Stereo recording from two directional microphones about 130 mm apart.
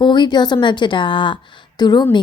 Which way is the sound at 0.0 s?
35° left (ahead or behind).